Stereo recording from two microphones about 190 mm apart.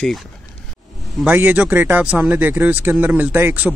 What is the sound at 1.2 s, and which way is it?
Speech, 10° right (ahead or behind).